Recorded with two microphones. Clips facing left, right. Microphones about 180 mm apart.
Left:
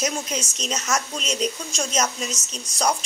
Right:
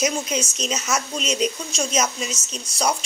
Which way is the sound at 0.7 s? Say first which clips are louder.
Left 1 dB; 5° right (ahead or behind).